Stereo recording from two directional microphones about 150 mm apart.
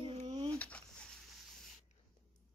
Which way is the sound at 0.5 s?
10° left (ahead or behind).